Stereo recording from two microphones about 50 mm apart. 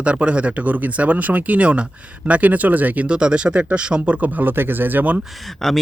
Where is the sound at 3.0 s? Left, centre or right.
Centre; by 5.1 s right.